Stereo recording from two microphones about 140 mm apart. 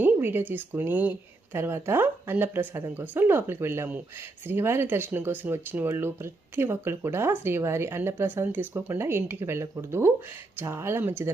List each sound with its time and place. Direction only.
0.0 s speech: 15° right (ahead or behind)